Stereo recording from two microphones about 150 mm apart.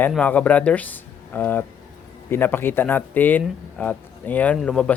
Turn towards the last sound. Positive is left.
turn(degrees=5)  # may be behind; listen again after turning